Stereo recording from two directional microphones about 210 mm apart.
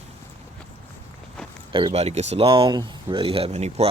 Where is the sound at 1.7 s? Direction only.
25° right (ahead or behind).